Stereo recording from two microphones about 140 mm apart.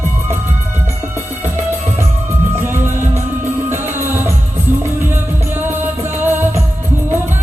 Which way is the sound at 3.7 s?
15° right (ahead or behind).